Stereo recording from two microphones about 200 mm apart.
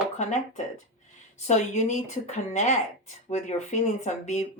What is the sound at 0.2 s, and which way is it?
Speech, 35° left (ahead or behind).